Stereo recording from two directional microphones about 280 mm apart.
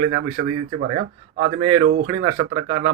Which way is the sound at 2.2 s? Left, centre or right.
Right.